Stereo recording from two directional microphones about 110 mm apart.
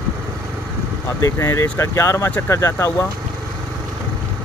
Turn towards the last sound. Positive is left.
turn(degrees=25)  # may be behind; listen again after turning